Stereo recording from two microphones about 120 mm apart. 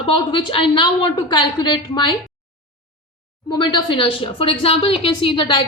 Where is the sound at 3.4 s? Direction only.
35° left (ahead or behind).